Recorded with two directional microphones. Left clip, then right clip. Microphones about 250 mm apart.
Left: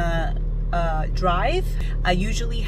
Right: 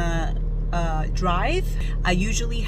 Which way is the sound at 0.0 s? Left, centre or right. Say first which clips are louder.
Left 2 dB; centre.